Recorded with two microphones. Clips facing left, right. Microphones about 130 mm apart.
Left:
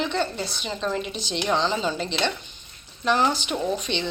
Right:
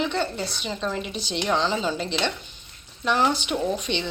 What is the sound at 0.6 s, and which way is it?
A woman's voice, 5° right (ahead or behind).